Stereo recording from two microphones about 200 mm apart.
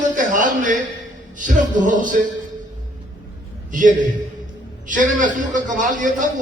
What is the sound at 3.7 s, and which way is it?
A man's voice, 40° right (ahead or behind).